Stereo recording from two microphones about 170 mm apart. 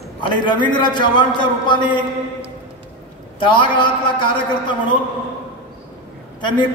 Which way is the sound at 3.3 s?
30° left (ahead or behind).